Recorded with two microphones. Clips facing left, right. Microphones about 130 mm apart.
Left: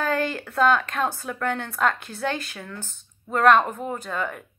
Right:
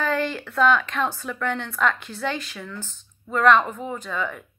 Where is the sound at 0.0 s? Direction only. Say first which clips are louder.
Even; 45° left (ahead or behind).